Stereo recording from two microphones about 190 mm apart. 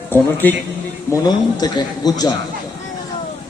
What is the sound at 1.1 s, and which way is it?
Speech, 20° left (ahead or behind).